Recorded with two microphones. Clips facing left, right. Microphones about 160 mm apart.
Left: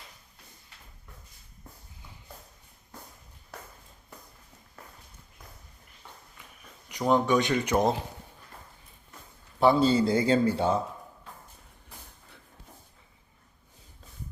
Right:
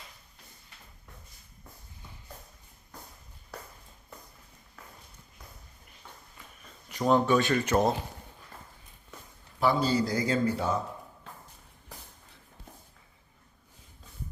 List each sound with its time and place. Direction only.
6.8 s speech: 15° left (ahead or behind)
9.6 s speech: 25° left (ahead or behind)